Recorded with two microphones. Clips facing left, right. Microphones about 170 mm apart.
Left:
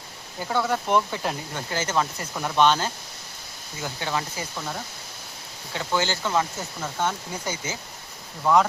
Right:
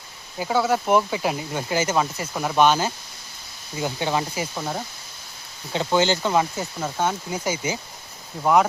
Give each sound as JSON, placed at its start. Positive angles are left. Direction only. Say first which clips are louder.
{"t": 0.3, "sound": "speech", "louder": "right 4 dB", "side_deg": -5}